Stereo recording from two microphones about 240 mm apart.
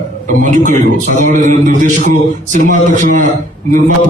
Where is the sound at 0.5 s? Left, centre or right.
Right.